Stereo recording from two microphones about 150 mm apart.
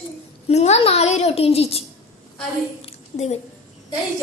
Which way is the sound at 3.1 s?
45° left (ahead or behind).